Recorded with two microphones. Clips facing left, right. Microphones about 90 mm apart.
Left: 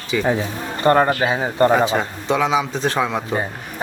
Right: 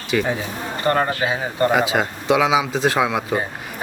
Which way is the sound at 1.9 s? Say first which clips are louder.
Right 1 dB; 5° right (ahead or behind).